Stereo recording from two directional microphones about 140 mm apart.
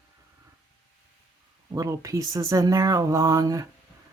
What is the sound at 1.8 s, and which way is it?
Speech, 25° right (ahead or behind).